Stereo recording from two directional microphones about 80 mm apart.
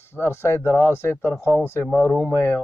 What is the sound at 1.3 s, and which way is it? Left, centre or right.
Speech, centre.